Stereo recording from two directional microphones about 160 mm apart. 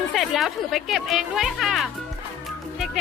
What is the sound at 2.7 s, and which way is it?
Music, centre (ahead or behind).